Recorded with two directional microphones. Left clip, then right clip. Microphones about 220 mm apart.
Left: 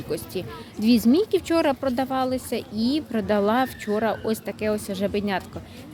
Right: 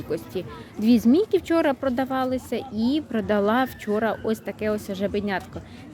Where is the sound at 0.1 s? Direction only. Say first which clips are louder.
Even; 5° right (ahead or behind).